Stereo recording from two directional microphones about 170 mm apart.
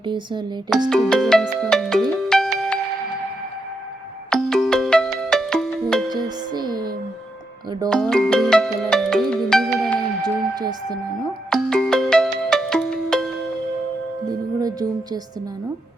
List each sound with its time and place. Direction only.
0.0 s speech: 30° right (ahead or behind)
0.9 s music: 5° left (ahead or behind)
4.3 s music: 5° left (ahead or behind)
6.1 s music: 25° right (ahead or behind)
7.9 s ringtone: 5° left (ahead or behind)
10.2 s a sound: 25° right (ahead or behind)
11.5 s ringtone: 5° left (ahead or behind)
14.6 s music: 20° right (ahead or behind)